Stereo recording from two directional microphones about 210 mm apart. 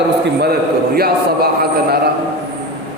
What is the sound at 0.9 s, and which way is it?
Speech, 45° right (ahead or behind).